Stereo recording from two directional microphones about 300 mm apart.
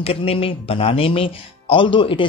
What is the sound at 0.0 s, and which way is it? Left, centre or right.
Speech, centre.